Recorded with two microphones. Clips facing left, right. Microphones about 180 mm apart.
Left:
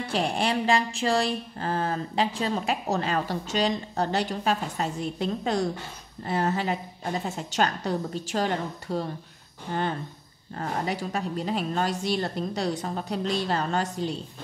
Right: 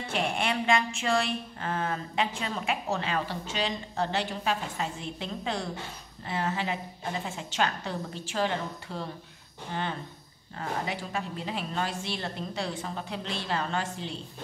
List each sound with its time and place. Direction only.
0.1 s a woman's voice: 35° left (ahead or behind)